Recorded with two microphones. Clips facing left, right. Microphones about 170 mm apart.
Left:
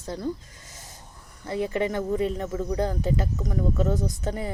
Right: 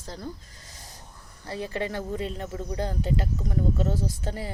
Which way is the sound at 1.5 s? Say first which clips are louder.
Left 5 dB; 20° left (ahead or behind).